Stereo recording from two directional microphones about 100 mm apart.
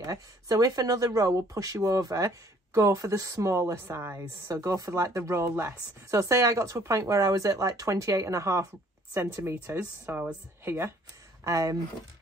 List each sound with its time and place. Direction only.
0.0 s a woman's voice: 35° right (ahead or behind)